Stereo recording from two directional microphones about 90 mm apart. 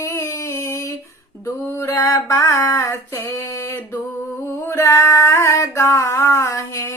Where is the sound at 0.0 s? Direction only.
35° left (ahead or behind).